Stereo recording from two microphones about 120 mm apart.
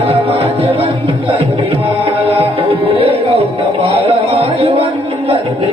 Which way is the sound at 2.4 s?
55° right (ahead or behind).